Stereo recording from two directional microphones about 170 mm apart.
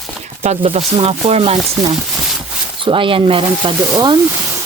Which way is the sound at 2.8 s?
30° right (ahead or behind).